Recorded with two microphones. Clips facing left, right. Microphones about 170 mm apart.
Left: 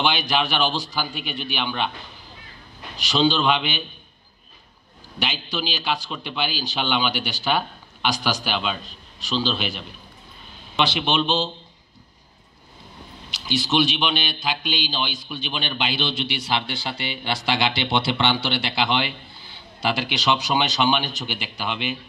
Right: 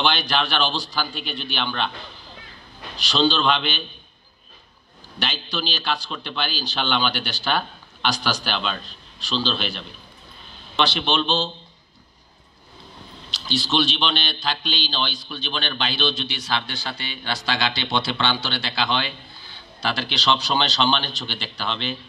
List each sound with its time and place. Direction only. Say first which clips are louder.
0.0 s a man's voice: even; 10° left (ahead or behind)
3.2 s a man's voice: left 1 dB; 10° left (ahead or behind)
5.2 s a man's voice: left 1 dB; 10° left (ahead or behind)
11.0 s a man's voice: left 1 dB; 10° left (ahead or behind)
13.6 s a man's voice: left 1 dB; 10° left (ahead or behind)